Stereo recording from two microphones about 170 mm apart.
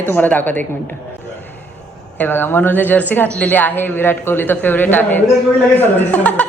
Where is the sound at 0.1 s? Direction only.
10° left (ahead or behind).